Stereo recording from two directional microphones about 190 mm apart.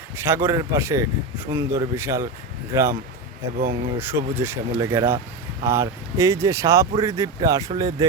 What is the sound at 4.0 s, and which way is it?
Speech, 10° right (ahead or behind).